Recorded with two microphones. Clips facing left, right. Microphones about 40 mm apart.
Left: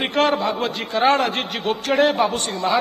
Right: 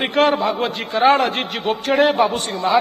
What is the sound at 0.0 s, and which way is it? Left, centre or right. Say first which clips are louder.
A man's voice: right 2 dB; centre.